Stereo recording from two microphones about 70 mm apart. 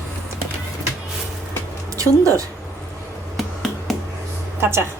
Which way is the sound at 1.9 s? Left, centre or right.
Right.